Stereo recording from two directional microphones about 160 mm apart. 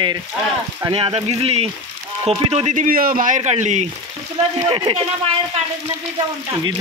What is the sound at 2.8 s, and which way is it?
A man's voice, 65° right (ahead or behind).